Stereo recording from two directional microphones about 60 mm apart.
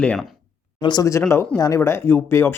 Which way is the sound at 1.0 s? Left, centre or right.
Left.